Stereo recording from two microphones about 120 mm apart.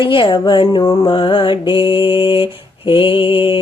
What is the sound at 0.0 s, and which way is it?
A woman's voice, 45° left (ahead or behind).